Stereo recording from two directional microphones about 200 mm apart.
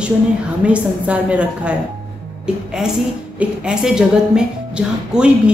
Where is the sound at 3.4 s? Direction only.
5° right (ahead or behind).